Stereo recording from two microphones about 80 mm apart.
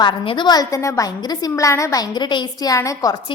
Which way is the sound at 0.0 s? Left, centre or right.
Left.